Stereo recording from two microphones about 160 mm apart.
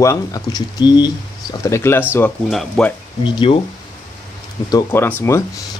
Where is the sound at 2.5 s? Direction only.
5° left (ahead or behind).